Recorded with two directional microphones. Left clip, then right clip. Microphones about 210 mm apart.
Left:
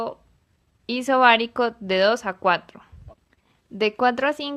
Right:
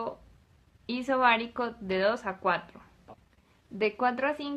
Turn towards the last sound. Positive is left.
turn(degrees=40)  # may be behind; listen again after turning